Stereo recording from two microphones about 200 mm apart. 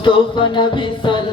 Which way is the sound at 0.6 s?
25° left (ahead or behind).